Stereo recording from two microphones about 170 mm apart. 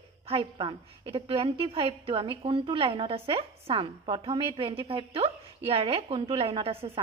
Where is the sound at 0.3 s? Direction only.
30° right (ahead or behind).